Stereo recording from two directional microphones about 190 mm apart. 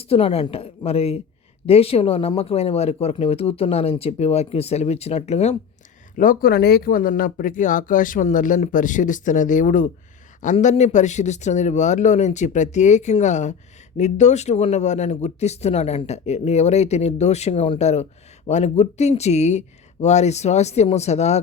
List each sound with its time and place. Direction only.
0.0 s speech: 30° left (ahead or behind)
6.1 s speech: 45° left (ahead or behind)